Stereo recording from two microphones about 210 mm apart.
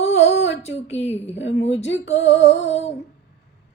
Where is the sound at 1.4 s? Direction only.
60° left (ahead or behind).